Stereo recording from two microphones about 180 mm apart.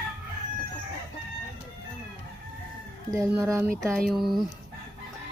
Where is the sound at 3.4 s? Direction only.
15° right (ahead or behind).